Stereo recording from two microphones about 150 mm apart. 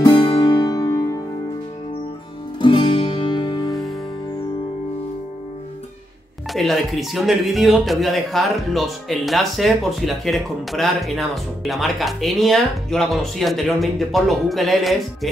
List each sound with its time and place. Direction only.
0.0 s music: 25° left (ahead or behind)
2.6 s music: 35° left (ahead or behind)
6.5 s speech: centre (ahead or behind)